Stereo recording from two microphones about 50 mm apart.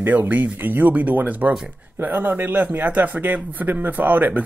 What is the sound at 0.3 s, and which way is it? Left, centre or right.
A man's voice, right.